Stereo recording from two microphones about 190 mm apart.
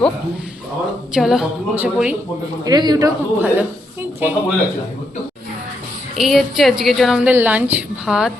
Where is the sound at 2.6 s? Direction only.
20° right (ahead or behind).